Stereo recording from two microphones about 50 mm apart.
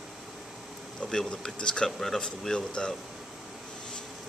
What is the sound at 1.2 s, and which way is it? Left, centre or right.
Speech, centre.